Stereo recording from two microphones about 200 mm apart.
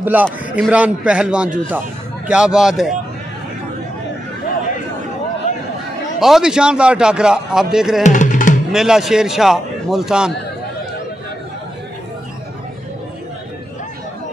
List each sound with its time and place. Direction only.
0.0 s a man's voice: 10° right (ahead or behind)
6.1 s a man's voice: centre (ahead or behind)
8.0 s music: 40° left (ahead or behind)
8.7 s a man's voice: centre (ahead or behind)